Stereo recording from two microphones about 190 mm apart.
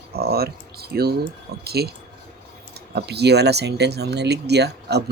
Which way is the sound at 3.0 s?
60° right (ahead or behind).